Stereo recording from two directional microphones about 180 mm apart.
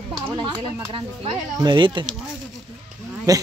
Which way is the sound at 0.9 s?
30° right (ahead or behind).